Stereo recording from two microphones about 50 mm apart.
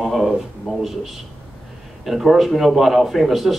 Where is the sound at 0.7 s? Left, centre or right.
Right.